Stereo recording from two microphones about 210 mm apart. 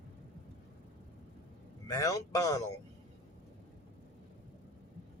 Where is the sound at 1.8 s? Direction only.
15° left (ahead or behind).